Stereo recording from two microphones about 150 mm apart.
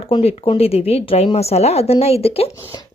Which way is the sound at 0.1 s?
40° left (ahead or behind).